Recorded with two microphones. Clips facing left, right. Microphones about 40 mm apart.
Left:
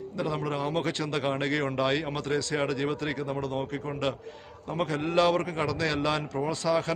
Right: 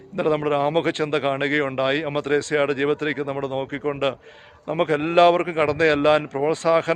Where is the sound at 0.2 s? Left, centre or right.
Right.